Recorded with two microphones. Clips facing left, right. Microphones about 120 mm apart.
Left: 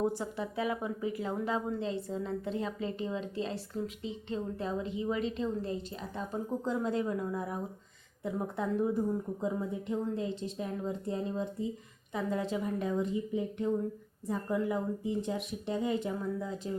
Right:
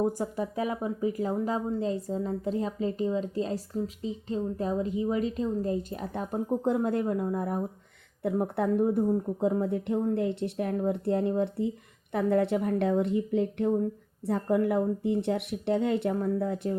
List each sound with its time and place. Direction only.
0.2 s a woman's voice: 40° right (ahead or behind); by 16.7 s 60° right (ahead or behind)